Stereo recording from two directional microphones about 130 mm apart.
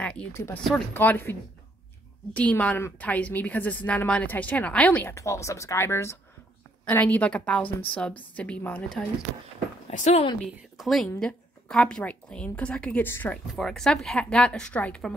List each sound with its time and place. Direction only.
0.0 s a sound: 10° left (ahead or behind)
0.9 s a woman's voice: 15° left (ahead or behind)
2.3 s a woman's voice: 10° left (ahead or behind)
9.8 s speech: 60° left (ahead or behind)
10.4 s a woman's voice: centre (ahead or behind)
13.5 s a woman's voice: centre (ahead or behind)